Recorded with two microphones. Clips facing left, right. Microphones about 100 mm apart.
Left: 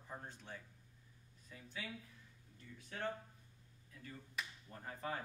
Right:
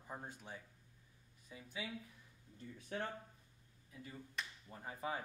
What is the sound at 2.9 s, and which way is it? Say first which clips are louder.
Speech: right 2 dB; 30° right (ahead or behind).